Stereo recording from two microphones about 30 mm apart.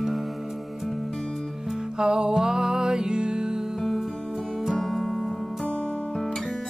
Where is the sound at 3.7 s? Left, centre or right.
Centre.